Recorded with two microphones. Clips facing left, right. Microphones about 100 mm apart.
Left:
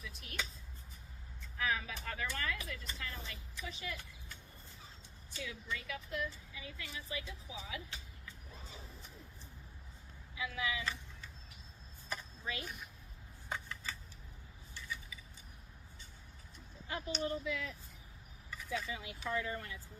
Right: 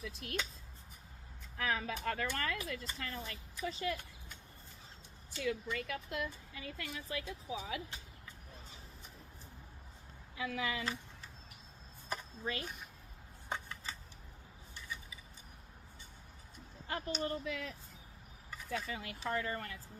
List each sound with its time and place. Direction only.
0.2 s speech: 55° right (ahead or behind)
1.5 s speech: 45° right (ahead or behind)
5.4 s speech: 55° right (ahead or behind)
10.3 s speech: 45° right (ahead or behind)
12.0 s a sound: 45° right (ahead or behind)
13.5 s a sound: 25° right (ahead or behind)
16.8 s speech: 45° right (ahead or behind)